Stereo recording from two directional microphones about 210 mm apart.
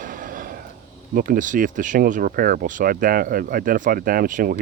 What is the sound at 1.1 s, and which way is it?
Speech, 40° right (ahead or behind).